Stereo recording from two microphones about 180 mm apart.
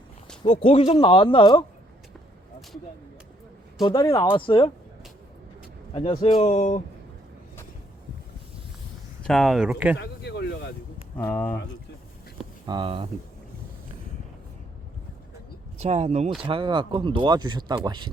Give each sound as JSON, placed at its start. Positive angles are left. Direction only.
{"t": 0.6, "sound": "a man's voice", "side_deg": 35}
{"t": 3.8, "sound": "a man's voice", "side_deg": 25}
{"t": 5.9, "sound": "speech", "side_deg": 30}
{"t": 9.2, "sound": "speech", "side_deg": 0}
{"t": 10.0, "sound": "speech", "side_deg": 65}
{"t": 11.2, "sound": "speech", "side_deg": 10}
{"t": 12.6, "sound": "speech", "side_deg": -25}
{"t": 15.8, "sound": "speech", "side_deg": -40}